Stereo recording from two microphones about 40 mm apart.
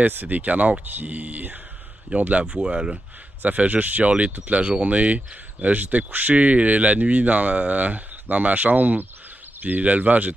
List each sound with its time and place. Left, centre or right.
0.0 s speech: right
2.4 s speech: right
3.4 s speech: right